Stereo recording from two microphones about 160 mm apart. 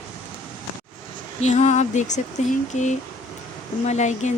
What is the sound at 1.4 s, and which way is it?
Speech, 50° left (ahead or behind).